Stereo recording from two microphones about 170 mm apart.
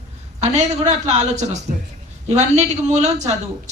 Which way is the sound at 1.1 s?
45° right (ahead or behind).